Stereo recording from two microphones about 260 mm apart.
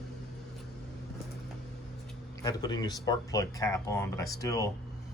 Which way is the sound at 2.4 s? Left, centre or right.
Centre.